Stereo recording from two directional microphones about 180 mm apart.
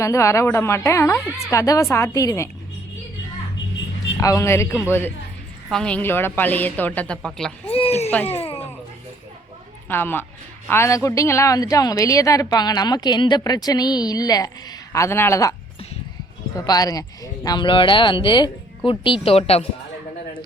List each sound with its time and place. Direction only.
0.0 s a woman's voice: 15° left (ahead or behind)
4.2 s a woman's voice: 15° left (ahead or behind)
7.7 s speech: 35° left (ahead or behind)
8.1 s a woman's voice: 10° left (ahead or behind)
8.4 s a sound: 35° left (ahead or behind)
9.9 s a woman's voice: 10° left (ahead or behind)
16.6 s a woman's voice: 20° left (ahead or behind)